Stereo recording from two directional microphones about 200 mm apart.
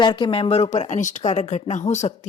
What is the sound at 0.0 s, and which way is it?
A woman's voice, 25° left (ahead or behind).